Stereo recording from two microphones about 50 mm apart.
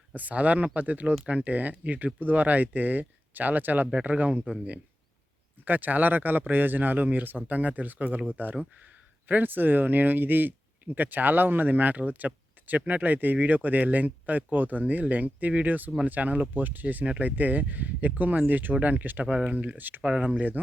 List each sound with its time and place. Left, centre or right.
0.1 s speech: right
5.6 s speech: right
9.3 s speech: right
20.0 s speech: right
20.2 s speech: right